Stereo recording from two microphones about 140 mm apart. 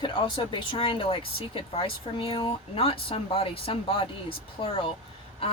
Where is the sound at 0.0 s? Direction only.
35° left (ahead or behind).